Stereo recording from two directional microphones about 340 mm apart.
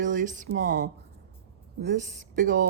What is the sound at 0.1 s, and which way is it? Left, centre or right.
Speech, right.